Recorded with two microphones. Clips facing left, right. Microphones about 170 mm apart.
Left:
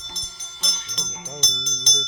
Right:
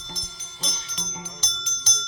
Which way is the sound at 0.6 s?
30° right (ahead or behind).